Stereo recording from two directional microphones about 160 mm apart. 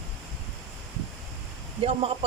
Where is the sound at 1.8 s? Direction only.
40° right (ahead or behind).